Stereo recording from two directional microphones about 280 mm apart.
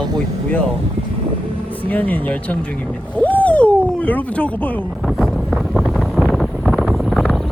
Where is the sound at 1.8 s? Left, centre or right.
Centre.